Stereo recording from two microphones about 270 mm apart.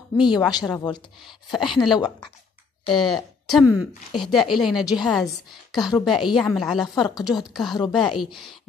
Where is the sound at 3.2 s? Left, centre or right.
Centre.